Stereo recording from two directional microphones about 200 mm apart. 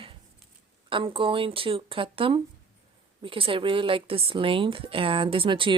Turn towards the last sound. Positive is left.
turn(degrees=-25)  # may be behind; listen again after turning